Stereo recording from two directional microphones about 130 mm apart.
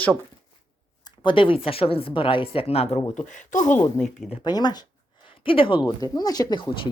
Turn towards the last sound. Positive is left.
turn(degrees=30)  # may be behind; listen again after turning